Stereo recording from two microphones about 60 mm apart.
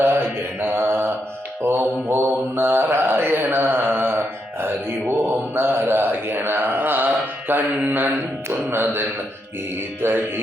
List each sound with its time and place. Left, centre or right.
0.0 s mantra: right